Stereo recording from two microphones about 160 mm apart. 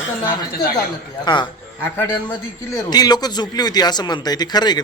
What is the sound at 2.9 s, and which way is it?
Speech, 25° left (ahead or behind).